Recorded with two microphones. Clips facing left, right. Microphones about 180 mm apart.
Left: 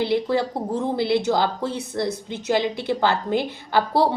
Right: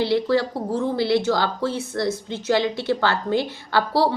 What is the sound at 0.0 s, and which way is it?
A woman's voice, 20° left (ahead or behind).